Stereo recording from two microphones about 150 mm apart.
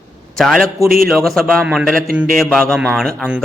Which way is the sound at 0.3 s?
Centre (ahead or behind).